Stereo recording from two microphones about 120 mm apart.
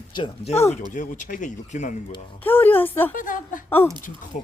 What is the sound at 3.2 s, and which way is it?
Speech, 90° left.